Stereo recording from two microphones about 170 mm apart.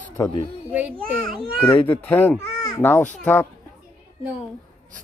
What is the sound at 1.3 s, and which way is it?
Speech, 10° left (ahead or behind).